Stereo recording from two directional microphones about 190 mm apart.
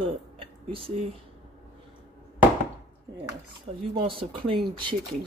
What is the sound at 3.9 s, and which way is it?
Speech, 25° right (ahead or behind).